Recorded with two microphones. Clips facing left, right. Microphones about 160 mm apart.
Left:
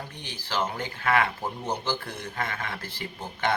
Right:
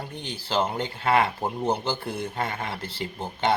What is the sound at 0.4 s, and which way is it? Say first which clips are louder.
Speech: right 4 dB; 30° right (ahead or behind).